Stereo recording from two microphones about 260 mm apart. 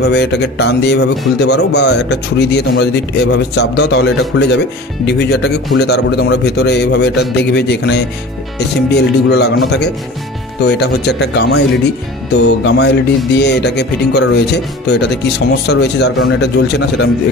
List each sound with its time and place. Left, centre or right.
0.0 s a man's voice: left